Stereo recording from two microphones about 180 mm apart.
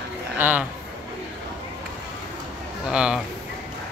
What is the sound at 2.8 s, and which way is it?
Speech, 5° right (ahead or behind).